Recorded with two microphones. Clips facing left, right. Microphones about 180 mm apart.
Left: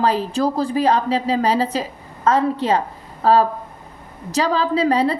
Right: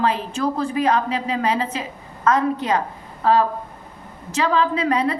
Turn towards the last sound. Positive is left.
turn(degrees=30)  # may be behind; listen again after turning